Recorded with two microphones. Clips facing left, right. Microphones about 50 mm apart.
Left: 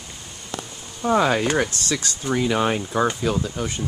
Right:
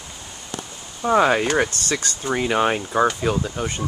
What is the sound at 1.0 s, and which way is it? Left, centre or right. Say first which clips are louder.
Speech: right 2 dB; centre.